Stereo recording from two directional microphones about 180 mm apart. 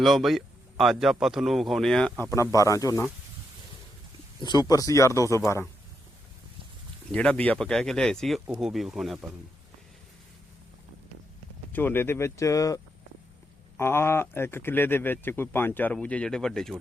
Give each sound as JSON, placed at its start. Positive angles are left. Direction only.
{"t": 0.0, "sound": "speech", "side_deg": 0}
{"t": 2.3, "sound": "speech", "side_deg": 20}
{"t": 4.4, "sound": "speech", "side_deg": 20}
{"t": 7.1, "sound": "speech", "side_deg": 5}
{"t": 11.7, "sound": "speech", "side_deg": 10}